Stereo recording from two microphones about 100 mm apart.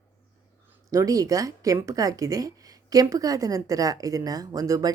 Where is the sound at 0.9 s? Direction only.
35° right (ahead or behind).